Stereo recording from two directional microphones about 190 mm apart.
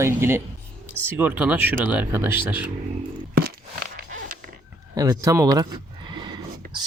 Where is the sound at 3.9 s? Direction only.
45° right (ahead or behind).